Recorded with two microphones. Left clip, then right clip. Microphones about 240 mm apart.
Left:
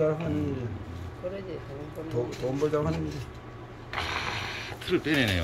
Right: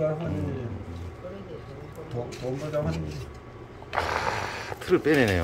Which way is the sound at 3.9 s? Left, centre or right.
Centre.